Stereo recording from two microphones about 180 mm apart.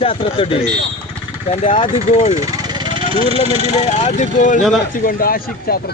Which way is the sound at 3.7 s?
35° left (ahead or behind).